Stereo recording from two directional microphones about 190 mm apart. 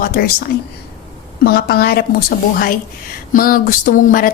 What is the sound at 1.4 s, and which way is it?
Speech, 55° left (ahead or behind).